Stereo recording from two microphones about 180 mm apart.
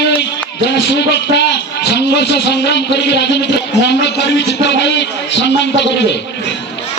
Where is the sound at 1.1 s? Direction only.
70° left (ahead or behind).